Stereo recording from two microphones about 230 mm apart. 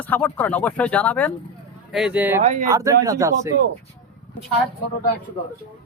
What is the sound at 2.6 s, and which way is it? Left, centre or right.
Speech, centre.